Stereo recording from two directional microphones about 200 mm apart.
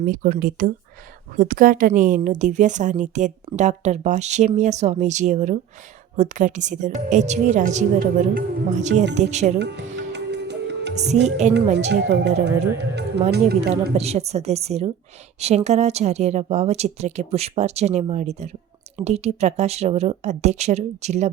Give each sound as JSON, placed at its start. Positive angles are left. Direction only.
{"t": 0.0, "sound": "speech", "side_deg": -45}
{"t": 9.6, "sound": "speech", "side_deg": -60}
{"t": 10.1, "sound": "music", "side_deg": -60}
{"t": 11.4, "sound": "speech", "side_deg": -35}
{"t": 11.9, "sound": "speech", "side_deg": -55}
{"t": 13.9, "sound": "speech", "side_deg": -30}